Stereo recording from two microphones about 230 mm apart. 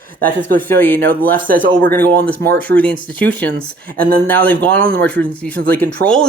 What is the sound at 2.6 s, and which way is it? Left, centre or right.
Speech, centre.